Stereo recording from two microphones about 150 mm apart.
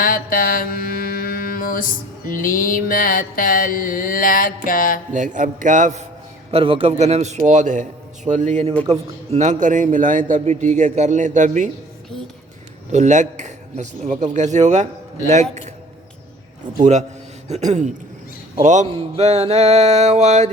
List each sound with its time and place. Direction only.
0.0 s mantra: 70° left (ahead or behind)
5.1 s a man's voice: 55° right (ahead or behind)
6.5 s a man's voice: 40° right (ahead or behind)
7.0 s a man's voice: 50° right (ahead or behind)
12.9 s a man's voice: 55° right (ahead or behind)
17.5 s a man's voice: 50° right (ahead or behind)